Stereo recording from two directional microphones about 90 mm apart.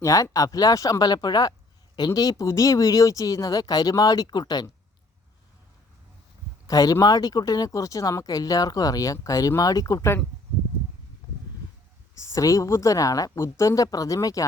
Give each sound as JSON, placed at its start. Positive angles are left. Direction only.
{"t": 0.0, "sound": "speech", "side_deg": 40}
{"t": 6.7, "sound": "speech", "side_deg": 40}
{"t": 12.1, "sound": "speech", "side_deg": 35}